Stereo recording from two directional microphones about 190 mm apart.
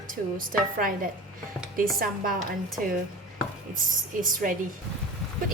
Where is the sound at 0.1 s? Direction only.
45° right (ahead or behind).